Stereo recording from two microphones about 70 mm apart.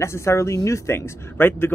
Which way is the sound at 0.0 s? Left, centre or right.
Left.